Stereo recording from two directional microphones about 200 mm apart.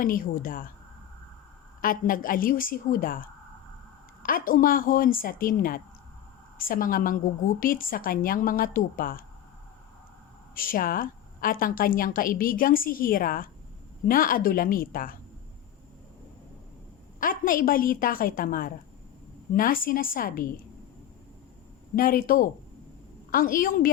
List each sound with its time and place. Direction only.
0.0 s a woman's voice: 45° left (ahead or behind)
1.8 s a woman's voice: 45° left (ahead or behind)
10.5 s a woman's voice: 45° left (ahead or behind)
17.2 s a woman's voice: 45° left (ahead or behind)
21.9 s a woman's voice: 45° left (ahead or behind)